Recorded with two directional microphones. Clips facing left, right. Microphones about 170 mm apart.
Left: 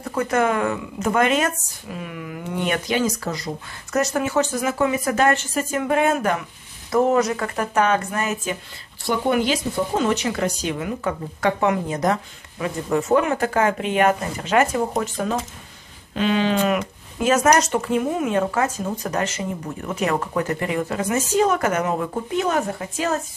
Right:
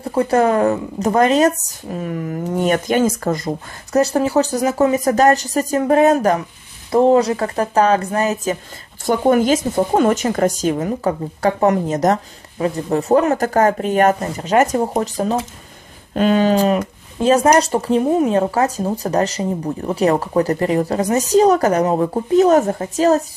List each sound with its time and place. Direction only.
0.0 s speech: 30° right (ahead or behind); by 3.5 s 50° right (ahead or behind)
3.9 s speech: 35° right (ahead or behind)